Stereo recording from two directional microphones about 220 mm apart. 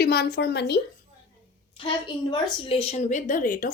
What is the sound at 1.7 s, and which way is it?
A woman's voice, 25° left (ahead or behind).